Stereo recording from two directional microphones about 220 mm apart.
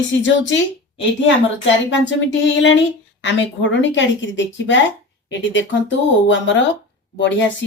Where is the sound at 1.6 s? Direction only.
55° left (ahead or behind).